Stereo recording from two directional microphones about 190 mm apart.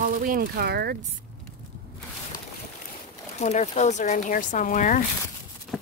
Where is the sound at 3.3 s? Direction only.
35° left (ahead or behind).